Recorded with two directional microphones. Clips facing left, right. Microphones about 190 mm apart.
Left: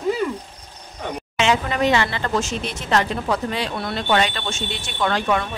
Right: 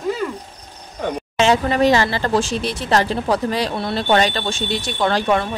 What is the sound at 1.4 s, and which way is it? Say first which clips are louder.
A woman's voice: right 4 dB; 35° right (ahead or behind).